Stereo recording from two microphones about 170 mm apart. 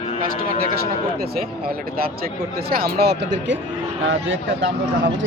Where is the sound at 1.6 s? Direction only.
60° right (ahead or behind); by 3.6 s 90° right.